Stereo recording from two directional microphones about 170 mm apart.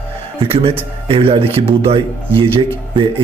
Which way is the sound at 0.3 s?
35° right (ahead or behind).